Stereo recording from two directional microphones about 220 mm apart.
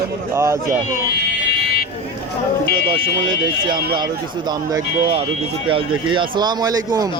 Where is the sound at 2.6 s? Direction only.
50° left (ahead or behind).